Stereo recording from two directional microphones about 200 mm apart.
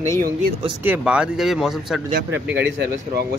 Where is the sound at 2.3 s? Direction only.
60° right (ahead or behind).